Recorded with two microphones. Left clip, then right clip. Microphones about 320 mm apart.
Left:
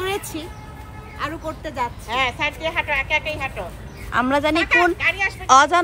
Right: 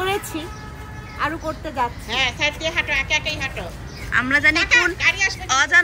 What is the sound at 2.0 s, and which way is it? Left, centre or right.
A woman's voice, left.